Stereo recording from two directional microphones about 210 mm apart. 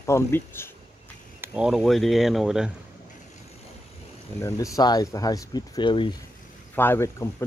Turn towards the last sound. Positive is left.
turn(degrees=15)  # may be behind; listen again after turning